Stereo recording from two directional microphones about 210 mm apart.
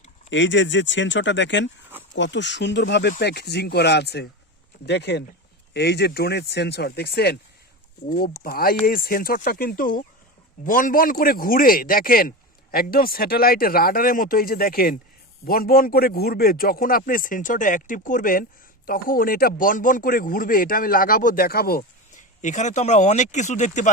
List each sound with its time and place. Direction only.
0.3 s a man's voice: 60° left (ahead or behind); by 23.9 s 35° left (ahead or behind)